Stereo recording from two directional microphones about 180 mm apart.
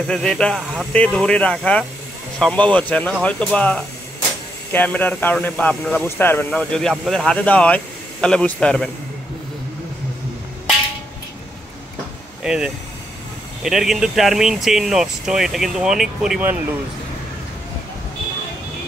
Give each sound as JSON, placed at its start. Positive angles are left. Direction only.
{"t": 0.1, "sound": "speech", "side_deg": 5}
{"t": 12.4, "sound": "speech", "side_deg": -5}